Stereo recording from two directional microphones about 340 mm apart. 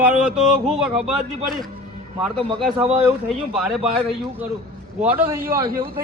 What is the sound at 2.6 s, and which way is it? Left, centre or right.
Speech, centre.